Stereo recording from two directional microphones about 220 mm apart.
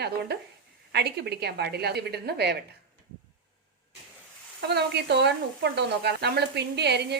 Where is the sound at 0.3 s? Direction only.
45° right (ahead or behind).